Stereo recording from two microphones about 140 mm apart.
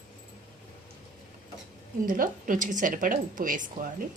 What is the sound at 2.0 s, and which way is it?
A woman's voice, 75° right (ahead or behind).